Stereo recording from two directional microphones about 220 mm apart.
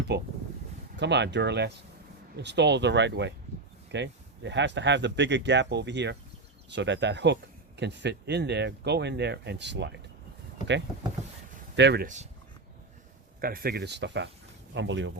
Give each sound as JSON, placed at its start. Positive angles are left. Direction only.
{"t": 0.1, "sound": "speech", "side_deg": -50}
{"t": 11.8, "sound": "speech", "side_deg": -50}
{"t": 12.0, "sound": "speech", "side_deg": -35}
{"t": 13.4, "sound": "speech", "side_deg": -40}